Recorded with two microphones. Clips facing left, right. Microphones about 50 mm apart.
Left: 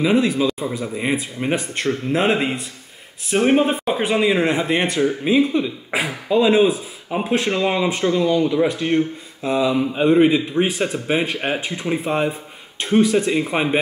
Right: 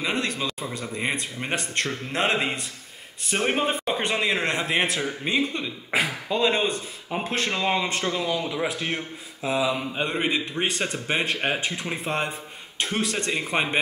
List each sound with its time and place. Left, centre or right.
0.0 s a man's voice: centre